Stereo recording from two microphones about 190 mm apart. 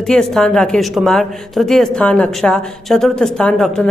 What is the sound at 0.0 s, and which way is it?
Speech, centre (ahead or behind).